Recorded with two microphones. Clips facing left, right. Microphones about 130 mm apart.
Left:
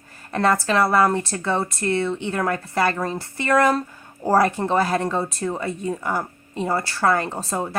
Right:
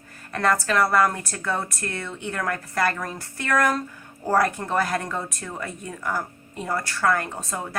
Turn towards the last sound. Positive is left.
turn(degrees=30)  # may be behind; listen again after turning